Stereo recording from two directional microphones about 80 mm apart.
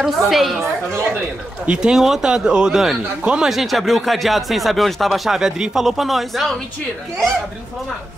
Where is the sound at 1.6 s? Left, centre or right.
Centre.